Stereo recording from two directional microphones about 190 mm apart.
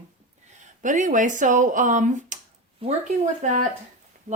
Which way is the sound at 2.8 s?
30° right (ahead or behind).